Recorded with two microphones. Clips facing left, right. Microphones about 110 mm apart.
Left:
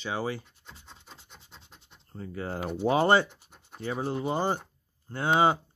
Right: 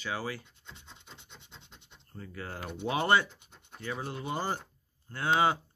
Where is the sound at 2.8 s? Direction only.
30° left (ahead or behind).